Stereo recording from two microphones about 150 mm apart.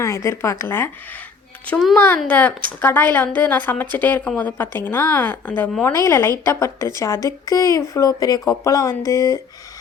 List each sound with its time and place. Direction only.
0.0 s a woman's voice: 20° left (ahead or behind)
1.6 s a woman's voice: 5° left (ahead or behind); by 9.4 s 20° left (ahead or behind)